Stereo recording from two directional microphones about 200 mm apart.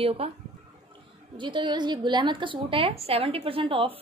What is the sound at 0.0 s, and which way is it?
Speech, 30° right (ahead or behind).